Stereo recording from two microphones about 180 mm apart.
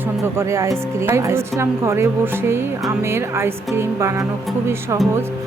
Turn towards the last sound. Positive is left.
turn(degrees=-15)  # may be behind; listen again after turning